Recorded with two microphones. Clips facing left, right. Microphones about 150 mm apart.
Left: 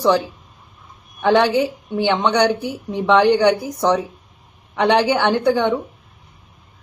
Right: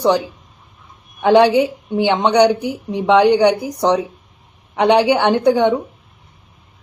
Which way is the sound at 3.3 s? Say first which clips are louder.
Right 2 dB; 10° right (ahead or behind).